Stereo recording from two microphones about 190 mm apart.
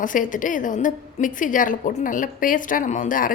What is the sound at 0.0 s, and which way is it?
A woman's voice, 45° left (ahead or behind).